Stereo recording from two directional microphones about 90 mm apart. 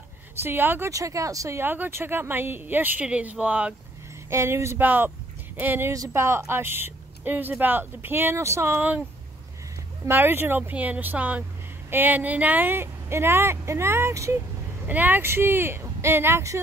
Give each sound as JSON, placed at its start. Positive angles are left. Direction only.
{"t": 0.4, "sound": "speech", "side_deg": -25}
{"t": 0.8, "sound": "speech", "side_deg": -35}
{"t": 1.6, "sound": "speech", "side_deg": -25}
{"t": 4.3, "sound": "speech", "side_deg": -30}
{"t": 10.0, "sound": "speech", "side_deg": -25}
{"t": 14.9, "sound": "speech", "side_deg": -20}